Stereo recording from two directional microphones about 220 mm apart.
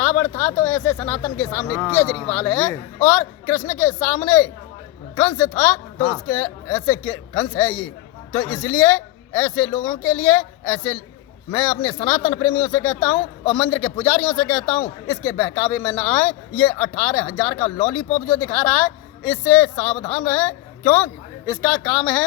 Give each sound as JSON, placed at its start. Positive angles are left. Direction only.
{"t": 0.2, "sound": "speech", "side_deg": 10}